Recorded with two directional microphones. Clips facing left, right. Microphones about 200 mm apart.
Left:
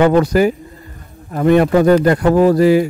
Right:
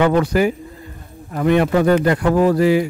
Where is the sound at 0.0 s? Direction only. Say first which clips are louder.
Left 4 dB; 40° left (ahead or behind).